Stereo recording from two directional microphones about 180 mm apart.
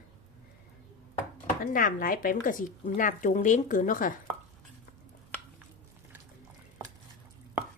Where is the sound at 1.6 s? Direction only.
50° left (ahead or behind).